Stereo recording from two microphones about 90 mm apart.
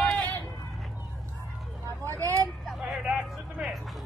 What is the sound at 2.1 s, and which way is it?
Speech, 40° right (ahead or behind).